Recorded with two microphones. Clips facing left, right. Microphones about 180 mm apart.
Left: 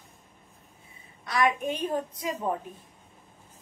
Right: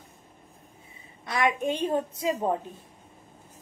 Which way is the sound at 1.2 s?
20° right (ahead or behind).